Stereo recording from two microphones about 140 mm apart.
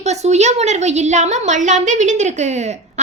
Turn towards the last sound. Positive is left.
turn(degrees=-55)  # may be behind; listen again after turning